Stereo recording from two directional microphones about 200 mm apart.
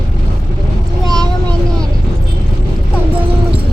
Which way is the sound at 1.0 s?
5° left (ahead or behind).